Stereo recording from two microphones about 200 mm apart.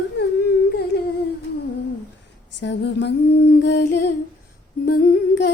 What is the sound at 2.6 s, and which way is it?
Humming, 60° left (ahead or behind).